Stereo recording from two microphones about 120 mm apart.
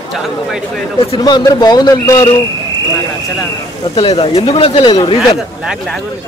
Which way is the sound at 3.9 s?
50° left (ahead or behind).